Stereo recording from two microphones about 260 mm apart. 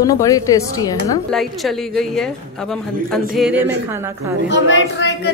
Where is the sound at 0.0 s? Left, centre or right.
Centre.